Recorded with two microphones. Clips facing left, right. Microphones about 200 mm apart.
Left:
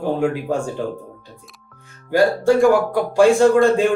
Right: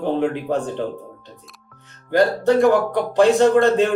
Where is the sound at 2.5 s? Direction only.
10° left (ahead or behind).